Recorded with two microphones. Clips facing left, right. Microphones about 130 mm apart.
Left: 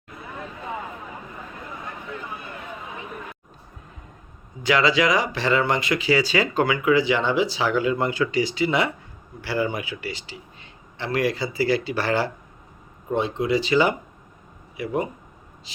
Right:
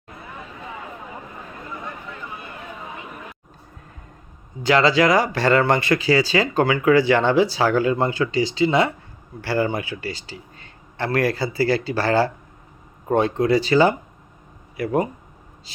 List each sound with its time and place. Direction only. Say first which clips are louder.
4.6 s speech: right 3 dB; 30° right (ahead or behind); by 6.0 s 55° right (ahead or behind)
6.0 s speech: right 2 dB; 40° right (ahead or behind)
7.1 s speech: right 5 dB; 55° right (ahead or behind)
7.4 s speech: right 3 dB; 45° right (ahead or behind)
7.9 s speech: right 2 dB; 30° right (ahead or behind)
9.4 s speech: right 3 dB; 40° right (ahead or behind)
10.9 s speech: right 3 dB; 45° right (ahead or behind)
13.1 s speech: right 4 dB; 45° right (ahead or behind)